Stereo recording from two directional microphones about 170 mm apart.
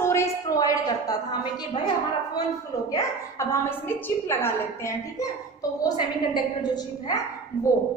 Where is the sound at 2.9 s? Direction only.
15° left (ahead or behind).